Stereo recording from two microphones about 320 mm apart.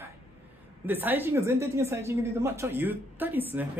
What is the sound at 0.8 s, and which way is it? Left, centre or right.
A woman's voice, centre.